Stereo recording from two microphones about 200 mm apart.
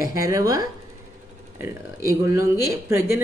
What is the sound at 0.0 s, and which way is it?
Speech, 15° right (ahead or behind).